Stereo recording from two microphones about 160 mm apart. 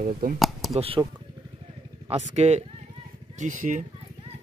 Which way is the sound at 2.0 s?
45° right (ahead or behind).